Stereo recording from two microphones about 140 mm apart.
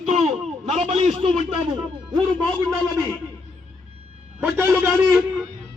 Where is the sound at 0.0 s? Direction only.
50° right (ahead or behind).